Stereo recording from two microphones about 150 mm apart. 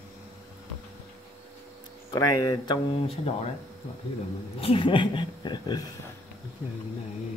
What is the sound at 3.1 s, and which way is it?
Speech, 40° left (ahead or behind).